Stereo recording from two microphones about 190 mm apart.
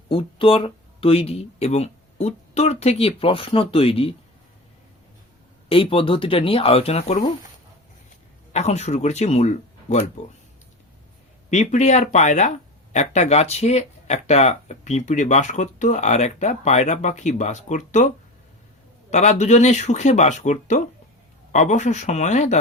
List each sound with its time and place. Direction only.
0.1 s speech: 30° left (ahead or behind)
5.6 s speech: 30° left (ahead or behind)
8.5 s speech: 35° left (ahead or behind)
11.5 s speech: 40° left (ahead or behind)
19.1 s speech: 35° left (ahead or behind)